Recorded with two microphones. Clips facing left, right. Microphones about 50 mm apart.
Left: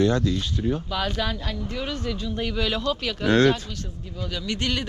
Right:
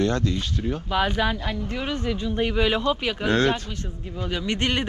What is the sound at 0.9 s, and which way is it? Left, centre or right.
Speech, right.